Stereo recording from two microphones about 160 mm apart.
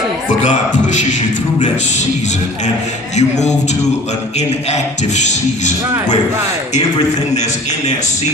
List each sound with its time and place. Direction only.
3.2 s a man's voice: 45° left (ahead or behind)